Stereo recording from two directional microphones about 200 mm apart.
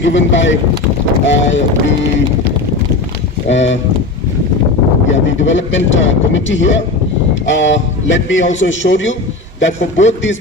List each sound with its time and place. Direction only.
0.0 s speech: 65° left (ahead or behind)
3.5 s speech: 65° left (ahead or behind)
5.1 s speech: 70° left (ahead or behind)